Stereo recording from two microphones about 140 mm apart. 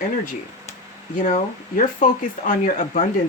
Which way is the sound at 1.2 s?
65° left (ahead or behind).